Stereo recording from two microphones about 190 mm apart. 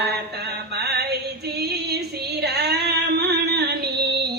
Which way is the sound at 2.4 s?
60° right (ahead or behind).